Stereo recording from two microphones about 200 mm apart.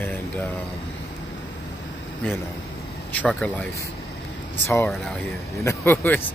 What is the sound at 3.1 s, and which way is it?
Speech, 5° left (ahead or behind).